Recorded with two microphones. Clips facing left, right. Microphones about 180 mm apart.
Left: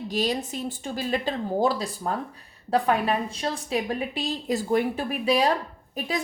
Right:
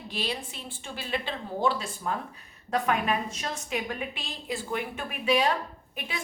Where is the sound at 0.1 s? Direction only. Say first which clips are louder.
Left 7 dB; 40° left (ahead or behind).